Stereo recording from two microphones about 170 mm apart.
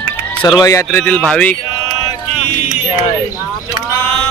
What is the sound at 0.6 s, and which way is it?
Speech, 15° left (ahead or behind).